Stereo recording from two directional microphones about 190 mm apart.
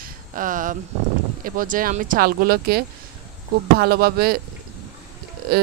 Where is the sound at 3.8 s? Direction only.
55° right (ahead or behind).